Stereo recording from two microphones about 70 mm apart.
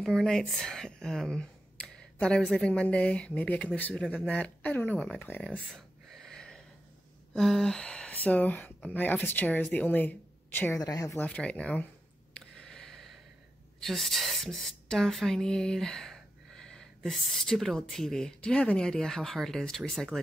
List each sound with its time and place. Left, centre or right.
0.0 s a woman's voice: centre
2.7 s speech: centre
4.9 s speech: centre
5.7 s gasp: centre
7.3 s speech: centre; by 10.7 s left
10.8 s a woman's voice: left
11.1 s speech: centre
12.4 s a sound: centre
13.7 s a woman's voice: centre